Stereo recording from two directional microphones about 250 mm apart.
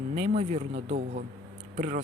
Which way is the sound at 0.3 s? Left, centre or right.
Right.